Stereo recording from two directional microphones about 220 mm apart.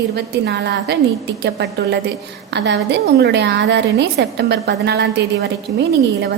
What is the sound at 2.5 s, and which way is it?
A woman's voice, 50° right (ahead or behind).